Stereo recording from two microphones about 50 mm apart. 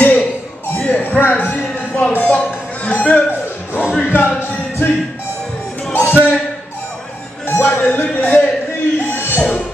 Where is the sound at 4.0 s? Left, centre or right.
Left.